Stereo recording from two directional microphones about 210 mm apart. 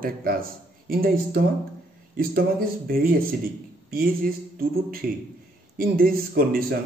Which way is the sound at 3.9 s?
45° right (ahead or behind).